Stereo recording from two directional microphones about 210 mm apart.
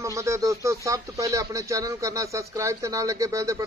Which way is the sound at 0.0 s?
15° right (ahead or behind).